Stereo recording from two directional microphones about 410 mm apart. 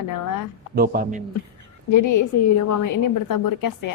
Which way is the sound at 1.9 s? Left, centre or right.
Left.